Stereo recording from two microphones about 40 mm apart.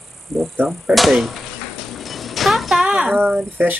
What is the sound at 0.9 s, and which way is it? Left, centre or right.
Speech, centre.